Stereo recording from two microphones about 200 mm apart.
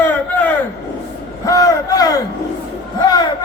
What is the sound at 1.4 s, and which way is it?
Battle cry, 20° left (ahead or behind).